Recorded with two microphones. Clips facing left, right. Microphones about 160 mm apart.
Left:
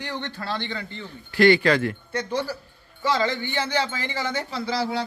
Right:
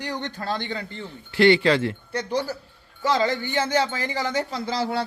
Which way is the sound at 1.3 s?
25° right (ahead or behind).